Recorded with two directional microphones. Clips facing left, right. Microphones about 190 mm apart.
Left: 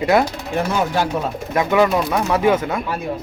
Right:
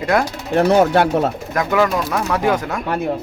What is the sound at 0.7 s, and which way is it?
Speech, 55° right (ahead or behind).